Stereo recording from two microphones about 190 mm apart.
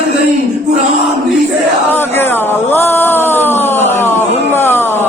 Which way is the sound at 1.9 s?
10° left (ahead or behind).